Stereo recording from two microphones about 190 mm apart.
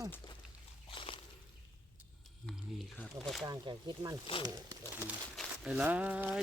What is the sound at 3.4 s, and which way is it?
Speech, 25° right (ahead or behind).